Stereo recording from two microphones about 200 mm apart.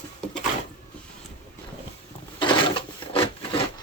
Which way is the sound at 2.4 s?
25° left (ahead or behind).